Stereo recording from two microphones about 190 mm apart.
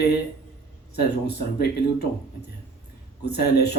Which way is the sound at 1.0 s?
60° left (ahead or behind).